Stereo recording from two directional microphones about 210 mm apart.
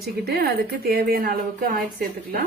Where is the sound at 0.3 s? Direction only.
50° right (ahead or behind).